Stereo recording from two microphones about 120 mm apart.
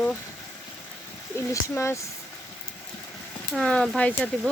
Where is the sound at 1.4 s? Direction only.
20° left (ahead or behind).